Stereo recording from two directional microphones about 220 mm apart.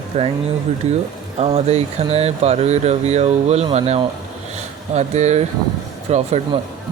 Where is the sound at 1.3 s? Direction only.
30° right (ahead or behind).